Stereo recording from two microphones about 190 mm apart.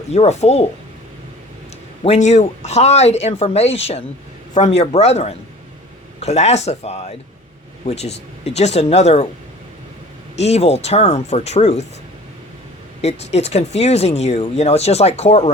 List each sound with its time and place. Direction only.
0.1 s speech: 35° left (ahead or behind)
2.0 s speech: 35° left (ahead or behind)
10.3 s speech: 35° left (ahead or behind)
13.0 s speech: 35° left (ahead or behind)